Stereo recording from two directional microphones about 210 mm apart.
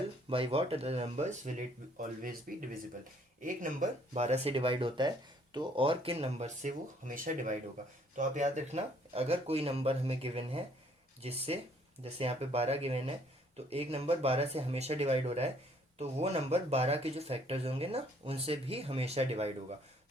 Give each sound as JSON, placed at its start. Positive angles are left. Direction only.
{"t": 0.3, "sound": "speech", "side_deg": -25}